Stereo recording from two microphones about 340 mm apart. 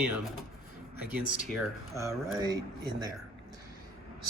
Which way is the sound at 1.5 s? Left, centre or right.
Centre.